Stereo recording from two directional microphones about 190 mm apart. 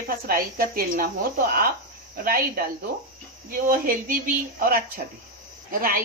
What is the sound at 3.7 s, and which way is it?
Speech, 45° right (ahead or behind).